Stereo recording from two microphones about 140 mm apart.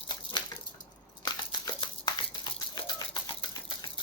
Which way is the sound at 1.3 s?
30° left (ahead or behind).